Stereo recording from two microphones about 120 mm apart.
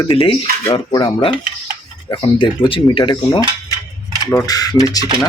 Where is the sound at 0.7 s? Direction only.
40° left (ahead or behind).